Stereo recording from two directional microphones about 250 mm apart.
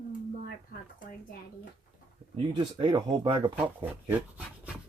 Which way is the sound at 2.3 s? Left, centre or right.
Centre.